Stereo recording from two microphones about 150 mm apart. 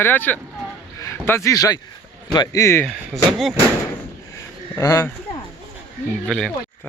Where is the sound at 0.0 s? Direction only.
15° left (ahead or behind).